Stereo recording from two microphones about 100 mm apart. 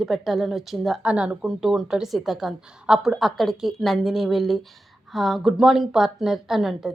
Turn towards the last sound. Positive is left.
turn(degrees=-5)  # may be behind; listen again after turning